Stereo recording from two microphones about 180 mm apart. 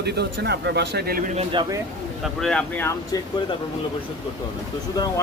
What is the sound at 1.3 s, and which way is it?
Speech, 30° right (ahead or behind).